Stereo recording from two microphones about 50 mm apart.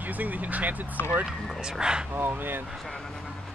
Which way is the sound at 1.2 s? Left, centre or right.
Centre.